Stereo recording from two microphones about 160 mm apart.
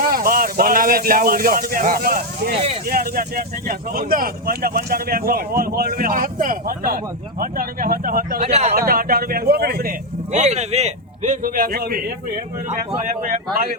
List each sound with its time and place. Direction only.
0.0 s speech: 65° right (ahead or behind)
8.4 s a man's voice: 45° right (ahead or behind)
8.9 s speech: 65° right (ahead or behind)
10.3 s a man's voice: 45° right (ahead or behind); by 12.0 s 70° right (ahead or behind)
13.2 s a man's voice: 55° right (ahead or behind)